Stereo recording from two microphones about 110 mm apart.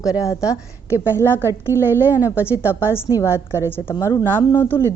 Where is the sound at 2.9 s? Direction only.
25° left (ahead or behind).